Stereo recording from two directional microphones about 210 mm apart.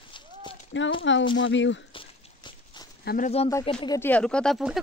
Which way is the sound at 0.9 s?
60° left (ahead or behind).